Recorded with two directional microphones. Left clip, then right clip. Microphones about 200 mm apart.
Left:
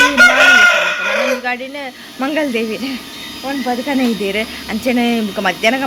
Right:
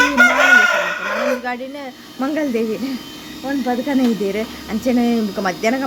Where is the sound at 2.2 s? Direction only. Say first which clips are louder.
Left 3 dB; centre (ahead or behind).